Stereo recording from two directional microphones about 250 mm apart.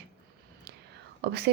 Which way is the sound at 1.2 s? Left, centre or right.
Right.